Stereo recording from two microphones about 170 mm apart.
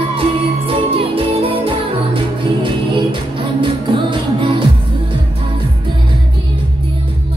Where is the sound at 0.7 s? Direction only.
35° right (ahead or behind).